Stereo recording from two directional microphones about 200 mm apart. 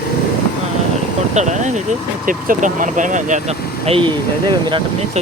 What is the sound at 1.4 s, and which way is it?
Speech, 35° right (ahead or behind).